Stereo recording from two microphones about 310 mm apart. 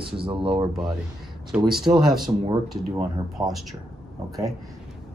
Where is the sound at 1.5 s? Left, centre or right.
Centre.